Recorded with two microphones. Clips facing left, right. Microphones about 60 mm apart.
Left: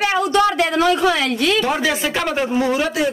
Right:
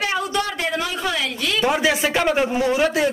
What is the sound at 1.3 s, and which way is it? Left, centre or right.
Speech, left.